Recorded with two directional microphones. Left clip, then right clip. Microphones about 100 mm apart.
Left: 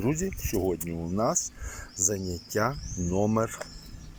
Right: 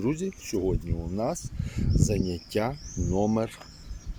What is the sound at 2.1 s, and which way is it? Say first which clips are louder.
Speech: right 2 dB; 20° right (ahead or behind).